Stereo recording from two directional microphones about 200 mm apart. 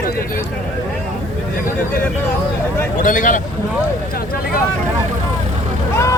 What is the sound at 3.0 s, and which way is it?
Speech, 40° left (ahead or behind).